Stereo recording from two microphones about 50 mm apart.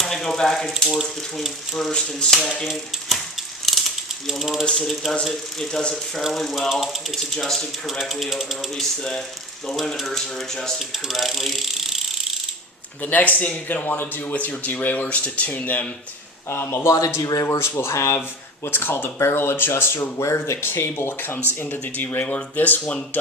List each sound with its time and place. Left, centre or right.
0.0 s speech: centre
1.9 s speech: centre
2.6 s mechanisms: centre
4.6 s speech: centre
7.3 s speech: centre
9.6 s speech: centre
10.9 s ratchet: centre
13.0 s speech: left
16.5 s speech: left
16.8 s speech: left
18.2 s speech: left
19.2 s speech: left
20.1 s speech: left